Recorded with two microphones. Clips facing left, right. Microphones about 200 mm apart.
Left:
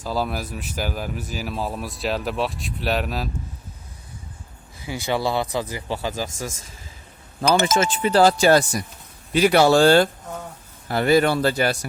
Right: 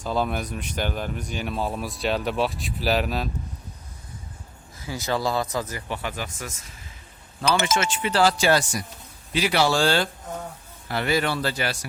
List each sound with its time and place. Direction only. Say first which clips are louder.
0.0 s speech: even; 5° left (ahead or behind)
4.9 s speech: left 2 dB; 20° left (ahead or behind)
5.5 s speech: left 3 dB; 30° left (ahead or behind)
7.4 s speech: left 4 dB; 45° left (ahead or behind)